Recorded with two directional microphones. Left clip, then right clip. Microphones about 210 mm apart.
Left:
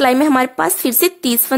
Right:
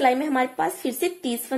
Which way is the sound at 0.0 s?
45° left (ahead or behind).